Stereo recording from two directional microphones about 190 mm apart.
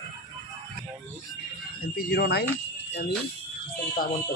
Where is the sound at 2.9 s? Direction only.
65° left (ahead or behind).